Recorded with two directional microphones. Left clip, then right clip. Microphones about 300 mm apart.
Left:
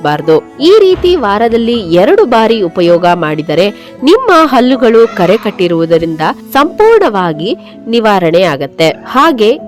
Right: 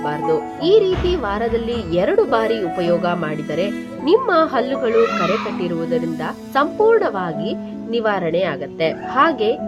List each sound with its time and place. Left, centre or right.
0.0 s speech: left